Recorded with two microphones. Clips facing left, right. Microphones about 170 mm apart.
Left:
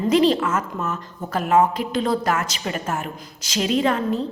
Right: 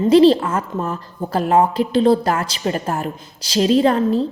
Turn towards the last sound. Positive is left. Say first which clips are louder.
# right 5 dB
turn(degrees=-35)  # may be behind; listen again after turning